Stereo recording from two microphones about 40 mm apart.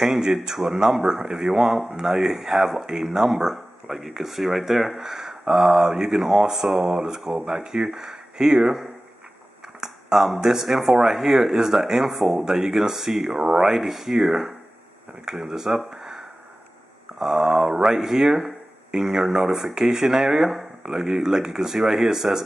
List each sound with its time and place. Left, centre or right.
0.0 s speech: centre
5.0 s speech: centre
9.8 s speech: centre
15.8 s a sound: centre
17.2 s speech: centre